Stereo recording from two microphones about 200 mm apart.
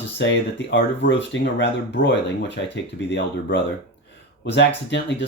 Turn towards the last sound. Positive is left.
turn(degrees=60)  # may be behind; listen again after turning